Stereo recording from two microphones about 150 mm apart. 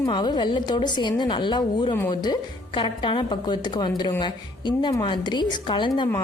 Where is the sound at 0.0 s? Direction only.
30° left (ahead or behind).